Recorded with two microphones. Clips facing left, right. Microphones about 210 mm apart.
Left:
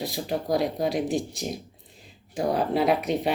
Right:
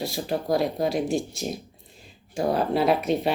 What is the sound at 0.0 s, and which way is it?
Speech, 20° left (ahead or behind).